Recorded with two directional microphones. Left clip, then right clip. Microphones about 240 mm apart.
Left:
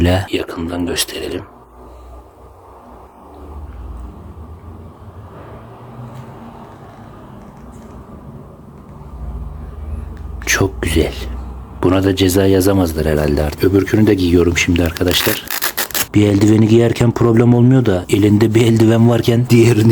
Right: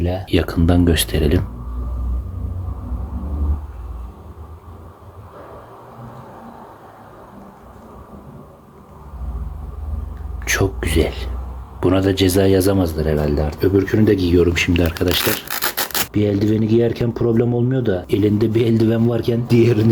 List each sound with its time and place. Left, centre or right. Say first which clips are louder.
0.0 s speech: left 8 dB; left
0.3 s speech: right 2 dB; centre
10.4 s whispering: left 3 dB; centre
11.8 s speech: left 2 dB; centre
15.4 s rub: left 2 dB; centre
16.1 s speech: left 7 dB; left